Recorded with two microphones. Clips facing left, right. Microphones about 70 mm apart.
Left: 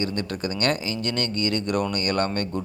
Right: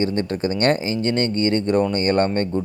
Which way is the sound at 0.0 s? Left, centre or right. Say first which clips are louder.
Right 6 dB; right.